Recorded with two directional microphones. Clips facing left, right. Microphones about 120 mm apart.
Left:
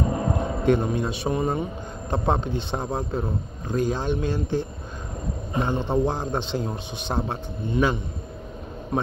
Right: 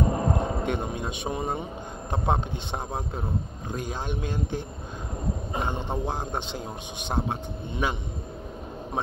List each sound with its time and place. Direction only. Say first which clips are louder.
0.1 s a man's voice: left 1 dB; 20° right (ahead or behind)